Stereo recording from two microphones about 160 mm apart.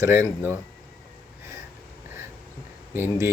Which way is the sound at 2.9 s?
15° right (ahead or behind).